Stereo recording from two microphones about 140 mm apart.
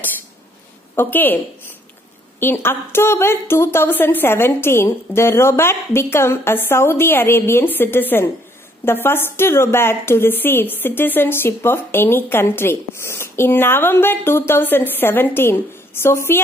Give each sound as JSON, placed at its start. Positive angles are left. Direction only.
{"t": 0.9, "sound": "a woman's voice", "side_deg": 15}